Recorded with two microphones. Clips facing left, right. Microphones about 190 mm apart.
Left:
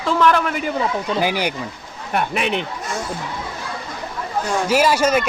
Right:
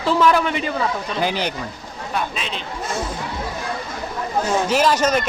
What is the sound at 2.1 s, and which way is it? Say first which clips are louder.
Speech: left 6 dB; 65° left (ahead or behind).